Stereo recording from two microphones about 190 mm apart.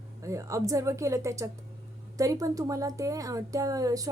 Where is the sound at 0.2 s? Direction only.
15° right (ahead or behind).